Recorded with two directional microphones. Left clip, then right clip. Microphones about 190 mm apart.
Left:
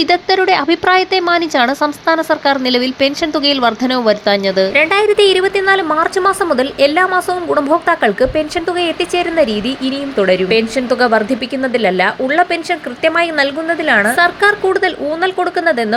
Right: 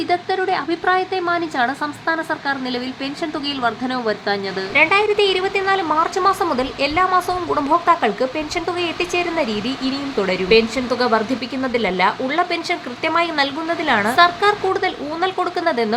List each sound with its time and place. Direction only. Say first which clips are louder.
0.0 s speech: left 7 dB; 30° left (ahead or behind)